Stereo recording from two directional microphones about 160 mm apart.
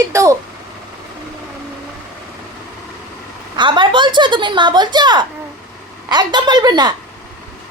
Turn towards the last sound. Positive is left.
turn(degrees=-25)  # may be behind; listen again after turning